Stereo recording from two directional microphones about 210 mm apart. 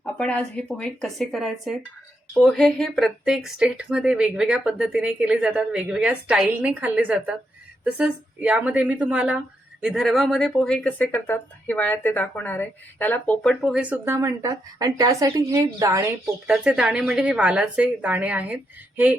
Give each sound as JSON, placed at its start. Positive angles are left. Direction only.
{"t": 0.0, "sound": "a woman's voice", "side_deg": 5}